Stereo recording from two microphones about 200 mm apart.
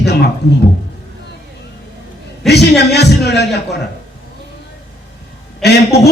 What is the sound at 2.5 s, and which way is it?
A man's voice, 55° left (ahead or behind).